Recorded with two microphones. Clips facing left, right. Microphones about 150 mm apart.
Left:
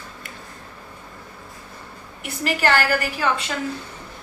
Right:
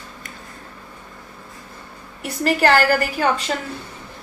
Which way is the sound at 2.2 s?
40° right (ahead or behind).